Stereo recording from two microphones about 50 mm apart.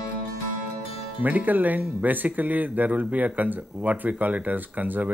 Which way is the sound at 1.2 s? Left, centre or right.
Right.